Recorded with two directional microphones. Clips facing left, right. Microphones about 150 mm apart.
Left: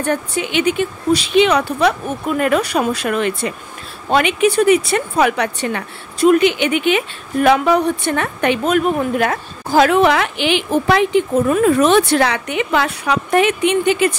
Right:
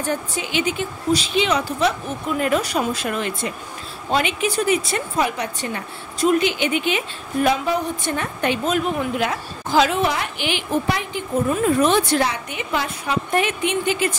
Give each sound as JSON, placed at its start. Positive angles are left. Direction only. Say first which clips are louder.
{"t": 0.0, "sound": "a woman's voice", "louder": "left 5 dB", "side_deg": 60}